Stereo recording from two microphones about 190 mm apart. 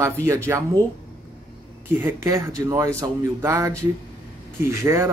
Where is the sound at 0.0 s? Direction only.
15° right (ahead or behind).